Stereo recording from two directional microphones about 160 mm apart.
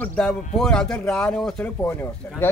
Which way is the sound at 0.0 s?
5° left (ahead or behind).